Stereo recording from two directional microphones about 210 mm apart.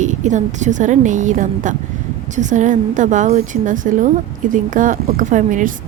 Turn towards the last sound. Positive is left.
turn(degrees=-40)  # may be behind; listen again after turning